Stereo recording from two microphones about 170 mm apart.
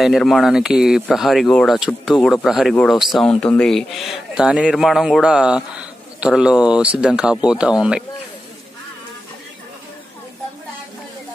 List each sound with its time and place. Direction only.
0.0 s speech: centre (ahead or behind)